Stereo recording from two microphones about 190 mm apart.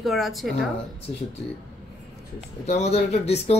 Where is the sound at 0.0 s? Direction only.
Centre (ahead or behind).